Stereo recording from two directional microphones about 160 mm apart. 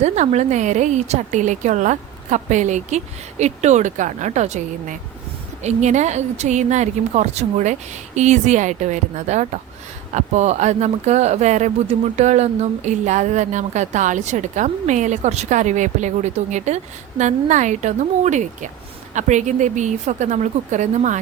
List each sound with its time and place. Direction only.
0.0 s speech: 45° right (ahead or behind)